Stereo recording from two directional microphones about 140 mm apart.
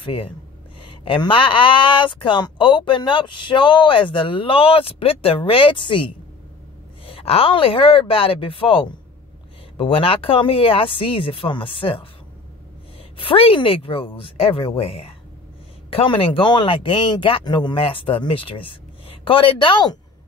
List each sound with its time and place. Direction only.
0.0 s speech: 40° left (ahead or behind)
13.2 s speech: 40° left (ahead or behind)